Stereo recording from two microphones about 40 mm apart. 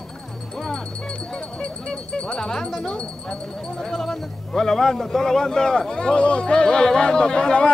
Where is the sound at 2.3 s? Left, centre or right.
Centre.